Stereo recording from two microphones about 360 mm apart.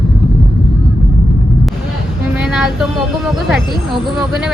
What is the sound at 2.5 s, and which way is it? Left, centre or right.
Speech, centre.